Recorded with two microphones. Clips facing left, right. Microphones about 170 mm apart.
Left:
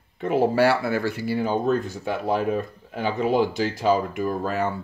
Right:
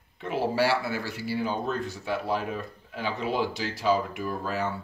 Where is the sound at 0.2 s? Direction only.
50° left (ahead or behind).